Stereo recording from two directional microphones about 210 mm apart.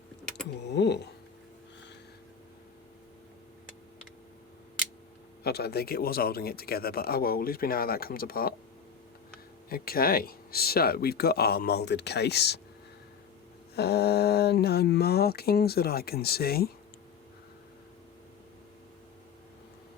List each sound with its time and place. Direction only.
0.7 s speech: 55° left (ahead or behind)
5.4 s speech: 50° left (ahead or behind)
9.6 s speech: 45° left (ahead or behind)
13.7 s speech: 50° left (ahead or behind)